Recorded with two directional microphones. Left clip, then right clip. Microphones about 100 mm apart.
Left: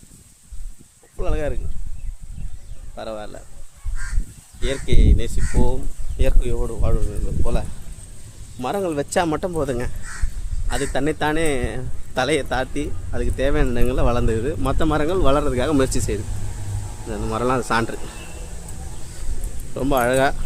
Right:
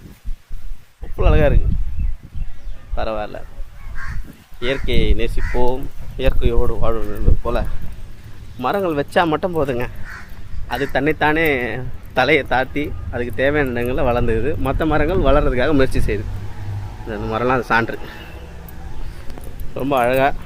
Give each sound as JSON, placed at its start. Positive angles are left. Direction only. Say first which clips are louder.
{"t": 1.2, "sound": "speech", "louder": "right 9 dB", "side_deg": 15}
{"t": 2.9, "sound": "speech", "louder": "right 7 dB", "side_deg": 20}
{"t": 4.6, "sound": "speech", "louder": "right 5 dB", "side_deg": 30}
{"t": 6.6, "sound": "speech", "louder": "right 6 dB", "side_deg": 10}
{"t": 8.5, "sound": "speech", "louder": "right 4 dB", "side_deg": 30}
{"t": 9.5, "sound": "speech", "louder": "right 4 dB", "side_deg": 25}
{"t": 19.7, "sound": "speech", "louder": "right 2 dB", "side_deg": 50}